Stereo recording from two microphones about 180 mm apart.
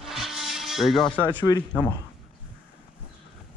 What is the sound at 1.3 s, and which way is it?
Speech, 20° left (ahead or behind).